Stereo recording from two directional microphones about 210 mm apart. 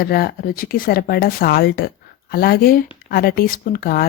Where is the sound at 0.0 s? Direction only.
45° left (ahead or behind).